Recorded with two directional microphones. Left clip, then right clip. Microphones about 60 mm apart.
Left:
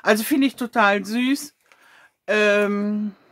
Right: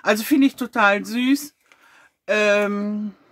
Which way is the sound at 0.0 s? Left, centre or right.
Left.